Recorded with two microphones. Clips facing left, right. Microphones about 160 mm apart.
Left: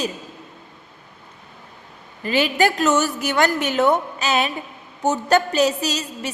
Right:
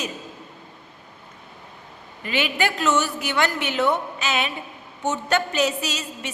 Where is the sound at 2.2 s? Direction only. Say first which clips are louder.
Left 5 dB; 40° left (ahead or behind).